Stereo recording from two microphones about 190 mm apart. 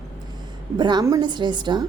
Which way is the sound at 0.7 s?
25° right (ahead or behind).